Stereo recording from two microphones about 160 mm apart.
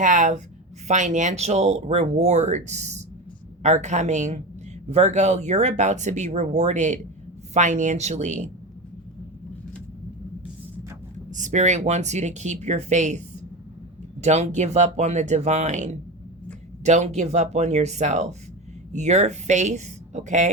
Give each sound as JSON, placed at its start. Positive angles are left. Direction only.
{"t": 0.0, "sound": "speech", "side_deg": -55}
{"t": 11.3, "sound": "speech", "side_deg": -50}